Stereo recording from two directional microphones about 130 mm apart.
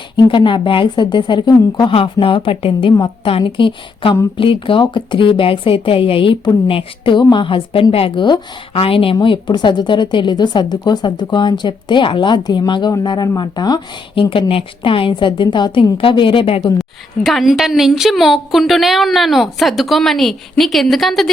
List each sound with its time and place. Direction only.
0.2 s a woman's voice: 40° left (ahead or behind)
1.9 s a woman's voice: 45° left (ahead or behind)
17.2 s a woman's voice: centre (ahead or behind)